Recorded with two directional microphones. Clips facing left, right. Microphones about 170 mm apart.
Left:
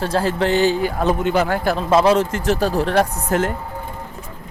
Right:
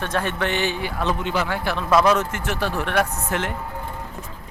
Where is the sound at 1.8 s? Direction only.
25° left (ahead or behind).